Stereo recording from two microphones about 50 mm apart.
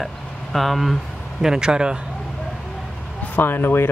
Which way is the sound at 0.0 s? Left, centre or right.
Centre.